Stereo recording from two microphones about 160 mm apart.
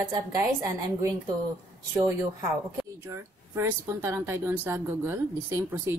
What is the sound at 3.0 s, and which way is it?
Speech, 15° right (ahead or behind).